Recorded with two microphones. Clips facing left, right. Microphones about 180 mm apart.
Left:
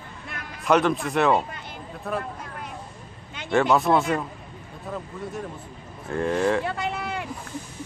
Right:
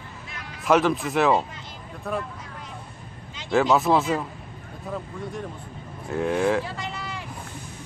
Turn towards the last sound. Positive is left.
turn(degrees=60)  # may be behind; listen again after turning